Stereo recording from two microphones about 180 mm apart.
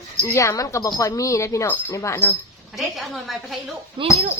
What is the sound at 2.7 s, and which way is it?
Speech, centre (ahead or behind).